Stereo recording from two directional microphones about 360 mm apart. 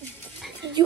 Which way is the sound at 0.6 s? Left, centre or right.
Right.